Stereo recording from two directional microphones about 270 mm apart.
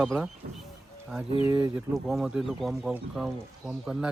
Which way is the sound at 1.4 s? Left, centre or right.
Centre.